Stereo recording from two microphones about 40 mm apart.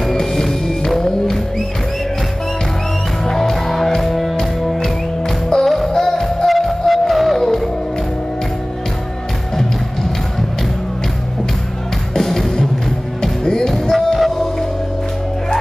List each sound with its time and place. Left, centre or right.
0.1 s music: centre
3.3 s music: centre
5.5 s music: centre
12.1 s music: centre
13.9 s music: centre